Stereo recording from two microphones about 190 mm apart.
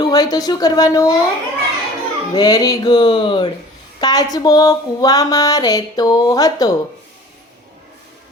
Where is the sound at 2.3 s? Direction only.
20° left (ahead or behind).